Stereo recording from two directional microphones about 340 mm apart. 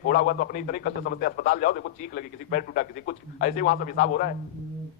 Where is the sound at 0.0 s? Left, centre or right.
Left.